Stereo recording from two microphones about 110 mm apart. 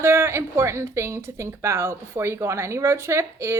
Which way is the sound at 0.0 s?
25° right (ahead or behind).